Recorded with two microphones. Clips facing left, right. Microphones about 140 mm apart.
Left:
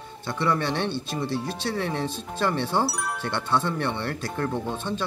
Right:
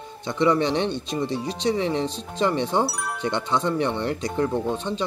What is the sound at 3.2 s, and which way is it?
Speech, 15° right (ahead or behind).